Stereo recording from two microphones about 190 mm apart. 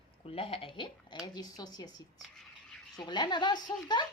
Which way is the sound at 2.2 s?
Centre (ahead or behind).